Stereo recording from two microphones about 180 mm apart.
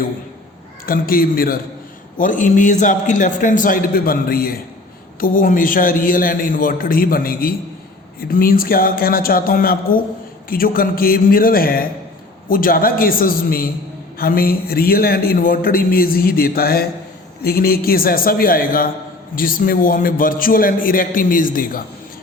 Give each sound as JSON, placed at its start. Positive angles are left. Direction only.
{"t": 0.9, "sound": "a man's voice", "side_deg": 55}